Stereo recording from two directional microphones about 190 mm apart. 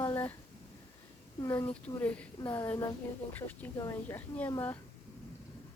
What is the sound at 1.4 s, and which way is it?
A woman's voice, 15° left (ahead or behind).